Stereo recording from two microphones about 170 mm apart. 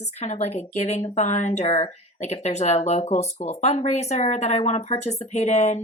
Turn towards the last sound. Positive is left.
turn(degrees=40)  # may be behind; listen again after turning